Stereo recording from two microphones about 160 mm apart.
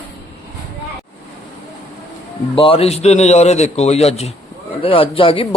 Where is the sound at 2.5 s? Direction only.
35° left (ahead or behind).